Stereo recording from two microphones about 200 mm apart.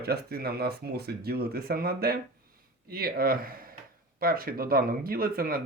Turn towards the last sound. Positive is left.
turn(degrees=-45)  # may be behind; listen again after turning